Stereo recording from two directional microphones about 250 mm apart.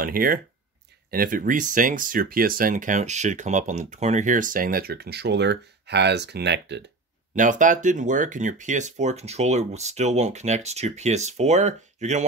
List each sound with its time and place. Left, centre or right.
0.0 s speech: right
7.3 s speech: right